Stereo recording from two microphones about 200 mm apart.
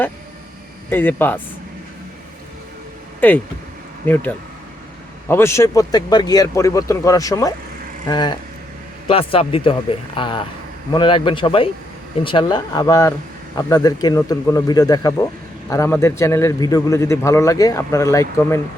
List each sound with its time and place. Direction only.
0.9 s a man's voice: 10° left (ahead or behind)
3.2 s a man's voice: 10° left (ahead or behind)